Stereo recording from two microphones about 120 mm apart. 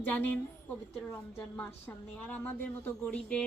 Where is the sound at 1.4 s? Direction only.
15° left (ahead or behind).